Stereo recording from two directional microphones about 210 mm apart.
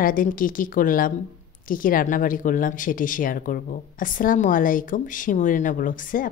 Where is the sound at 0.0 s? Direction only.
40° left (ahead or behind).